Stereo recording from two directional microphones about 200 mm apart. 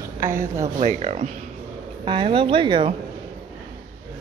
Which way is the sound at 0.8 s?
35° right (ahead or behind).